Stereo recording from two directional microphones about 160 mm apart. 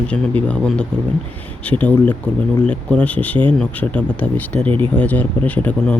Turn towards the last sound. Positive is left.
turn(degrees=10)  # may be behind; listen again after turning